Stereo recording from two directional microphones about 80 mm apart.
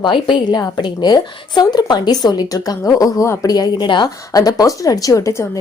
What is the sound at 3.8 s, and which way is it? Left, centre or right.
Speech, left.